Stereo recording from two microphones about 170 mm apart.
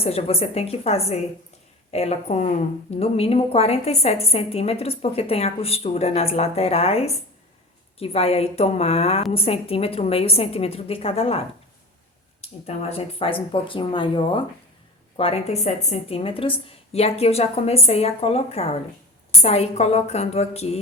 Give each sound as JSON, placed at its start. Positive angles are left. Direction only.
{"t": 0.0, "sound": "a woman's voice", "side_deg": 35}